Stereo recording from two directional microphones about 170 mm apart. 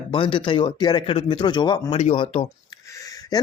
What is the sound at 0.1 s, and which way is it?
Speech, 30° left (ahead or behind).